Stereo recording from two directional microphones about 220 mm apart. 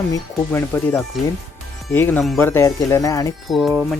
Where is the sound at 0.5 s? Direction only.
10° left (ahead or behind).